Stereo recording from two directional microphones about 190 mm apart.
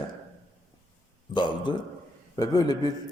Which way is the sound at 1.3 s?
25° left (ahead or behind).